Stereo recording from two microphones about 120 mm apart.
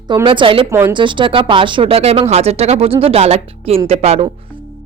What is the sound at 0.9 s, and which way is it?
Speech, 40° right (ahead or behind).